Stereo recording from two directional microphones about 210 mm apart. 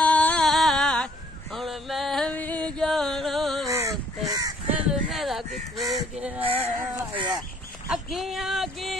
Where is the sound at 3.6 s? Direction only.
15° right (ahead or behind).